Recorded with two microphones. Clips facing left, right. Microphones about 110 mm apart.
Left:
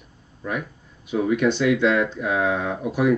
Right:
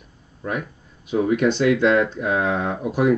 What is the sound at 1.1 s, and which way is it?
Speech, 45° right (ahead or behind).